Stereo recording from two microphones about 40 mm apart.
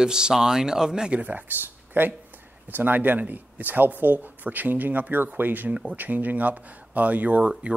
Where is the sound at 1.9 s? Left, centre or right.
Right.